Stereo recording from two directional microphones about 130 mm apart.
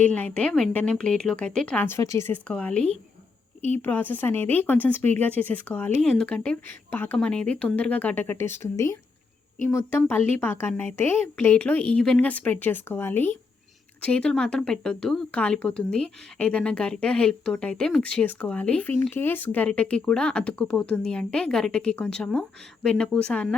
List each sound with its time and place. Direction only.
0.0 s speech: 10° left (ahead or behind)